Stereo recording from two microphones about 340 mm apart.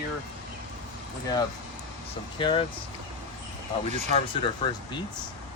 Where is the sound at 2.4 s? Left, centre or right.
Centre.